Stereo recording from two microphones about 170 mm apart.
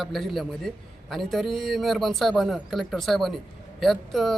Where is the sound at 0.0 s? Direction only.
Centre (ahead or behind).